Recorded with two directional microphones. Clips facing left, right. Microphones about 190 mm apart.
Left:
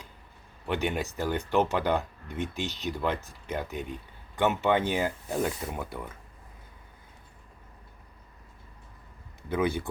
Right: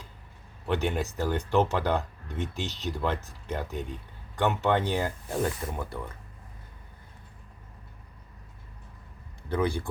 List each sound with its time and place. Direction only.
0.6 s speech: centre (ahead or behind)
9.6 s speech: 20° left (ahead or behind)